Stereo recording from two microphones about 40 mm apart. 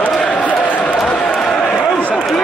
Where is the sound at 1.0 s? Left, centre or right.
Left.